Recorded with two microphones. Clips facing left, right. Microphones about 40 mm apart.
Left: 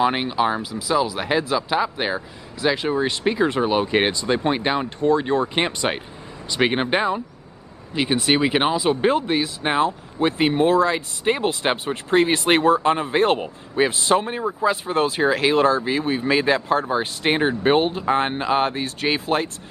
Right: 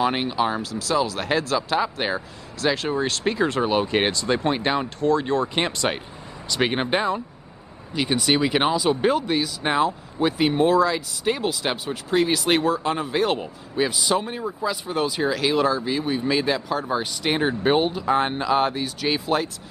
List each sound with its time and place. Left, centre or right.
0.0 s speech: centre; by 15.8 s left
16.0 s speech: left